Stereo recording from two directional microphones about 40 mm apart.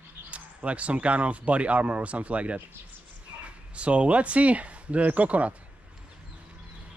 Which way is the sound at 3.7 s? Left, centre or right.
Right.